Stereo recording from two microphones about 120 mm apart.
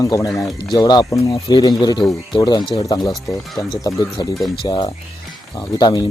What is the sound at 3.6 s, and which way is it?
Speech, 30° left (ahead or behind).